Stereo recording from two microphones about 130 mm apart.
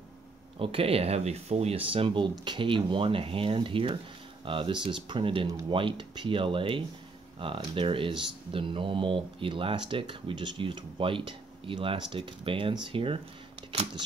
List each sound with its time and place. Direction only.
0.6 s speech: 45° right (ahead or behind)